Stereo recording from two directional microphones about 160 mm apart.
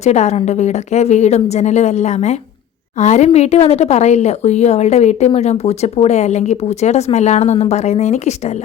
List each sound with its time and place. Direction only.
0.0 s a woman's voice: 45° left (ahead or behind)